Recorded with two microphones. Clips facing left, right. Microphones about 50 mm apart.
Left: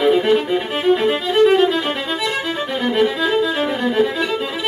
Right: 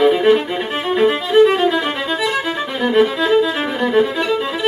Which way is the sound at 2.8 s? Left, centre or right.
Centre.